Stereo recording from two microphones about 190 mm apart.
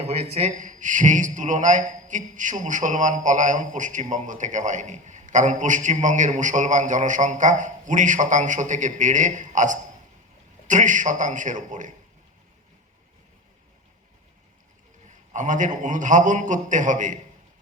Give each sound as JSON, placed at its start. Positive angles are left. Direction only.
{"t": 0.0, "sound": "a man's voice", "side_deg": -35}
{"t": 15.3, "sound": "a man's voice", "side_deg": -40}